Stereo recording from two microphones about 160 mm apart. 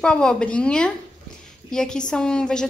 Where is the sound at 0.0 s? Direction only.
5° left (ahead or behind).